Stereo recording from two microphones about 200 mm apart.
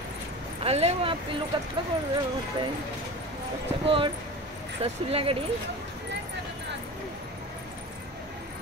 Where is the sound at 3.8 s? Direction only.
25° right (ahead or behind).